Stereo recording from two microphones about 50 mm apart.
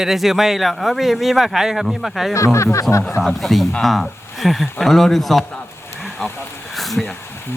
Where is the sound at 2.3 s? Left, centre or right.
Left.